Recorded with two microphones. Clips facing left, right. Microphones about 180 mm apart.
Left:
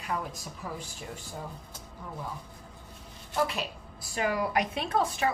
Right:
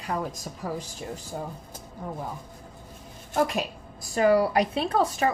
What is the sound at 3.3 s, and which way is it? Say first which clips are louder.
Speech: right 5 dB; 45° right (ahead or behind).